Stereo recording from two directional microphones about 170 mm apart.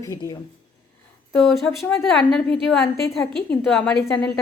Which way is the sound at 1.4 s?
Centre (ahead or behind).